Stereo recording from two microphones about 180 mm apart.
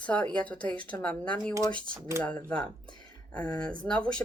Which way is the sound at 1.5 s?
25° right (ahead or behind).